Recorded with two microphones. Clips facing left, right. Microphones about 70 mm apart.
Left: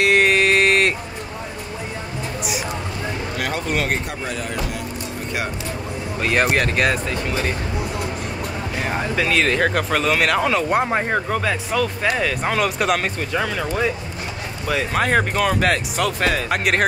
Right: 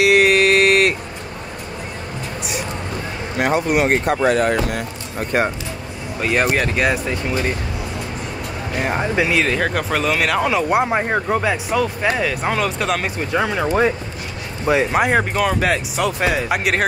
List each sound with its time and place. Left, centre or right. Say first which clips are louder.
0.0 s a sound: right 3 dB; centre
3.3 s speech: right 9 dB; right
3.6 s speech: right 5 dB; centre
3.9 s speech: right 9 dB; right
6.2 s speech: right 1 dB; centre
7.1 s speech: right 2 dB; centre
8.7 s speech: right 4 dB; centre
9.4 s speech: even; centre
13.2 s speech: right 3 dB; centre
15.0 s speech: right 1 dB; centre